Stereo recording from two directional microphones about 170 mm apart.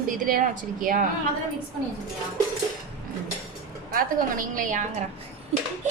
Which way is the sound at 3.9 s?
55° right (ahead or behind).